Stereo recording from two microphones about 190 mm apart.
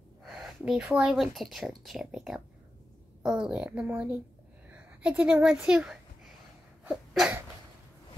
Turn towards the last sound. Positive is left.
turn(degrees=0)  # may be behind; listen again after turning